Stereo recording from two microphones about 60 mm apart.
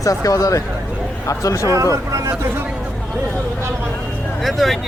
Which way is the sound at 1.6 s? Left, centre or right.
Right.